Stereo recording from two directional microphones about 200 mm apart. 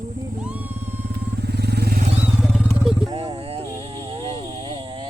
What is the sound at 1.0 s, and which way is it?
Vehicle, 55° right (ahead or behind).